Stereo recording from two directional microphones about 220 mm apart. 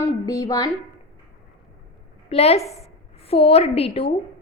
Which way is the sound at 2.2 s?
30° left (ahead or behind).